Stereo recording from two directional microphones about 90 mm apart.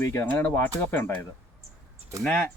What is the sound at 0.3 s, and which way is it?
Speech, 20° left (ahead or behind).